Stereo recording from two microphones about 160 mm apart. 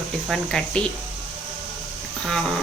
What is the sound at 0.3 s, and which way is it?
Speech, 5° left (ahead or behind).